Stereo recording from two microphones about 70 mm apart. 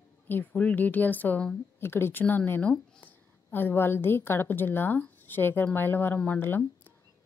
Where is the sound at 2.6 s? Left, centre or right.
Centre.